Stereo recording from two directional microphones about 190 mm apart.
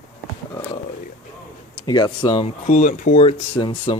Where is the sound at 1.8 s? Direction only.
20° left (ahead or behind).